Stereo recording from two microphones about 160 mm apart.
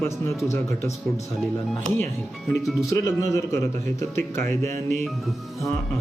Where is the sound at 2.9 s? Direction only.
20° left (ahead or behind).